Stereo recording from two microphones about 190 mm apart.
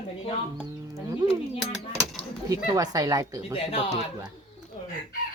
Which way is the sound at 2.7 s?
20° right (ahead or behind).